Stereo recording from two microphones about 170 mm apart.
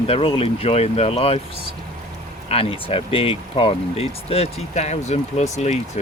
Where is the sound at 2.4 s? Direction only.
35° left (ahead or behind).